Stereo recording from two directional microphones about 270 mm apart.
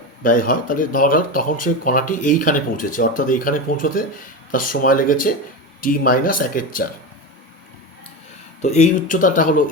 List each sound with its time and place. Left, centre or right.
0.2 s speech: left
8.6 s speech: left